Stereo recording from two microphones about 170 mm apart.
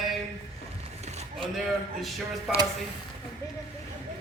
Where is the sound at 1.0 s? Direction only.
40° right (ahead or behind).